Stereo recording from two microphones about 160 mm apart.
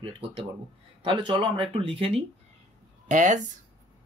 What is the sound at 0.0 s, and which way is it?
Speech, 35° right (ahead or behind).